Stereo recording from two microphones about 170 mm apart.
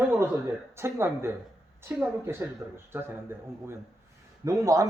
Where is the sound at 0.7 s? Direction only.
15° right (ahead or behind).